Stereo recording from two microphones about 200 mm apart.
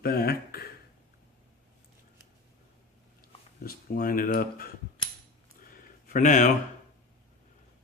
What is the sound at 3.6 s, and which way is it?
Speech, 45° left (ahead or behind).